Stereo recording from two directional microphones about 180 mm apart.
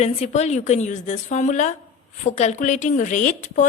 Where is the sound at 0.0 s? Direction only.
40° left (ahead or behind).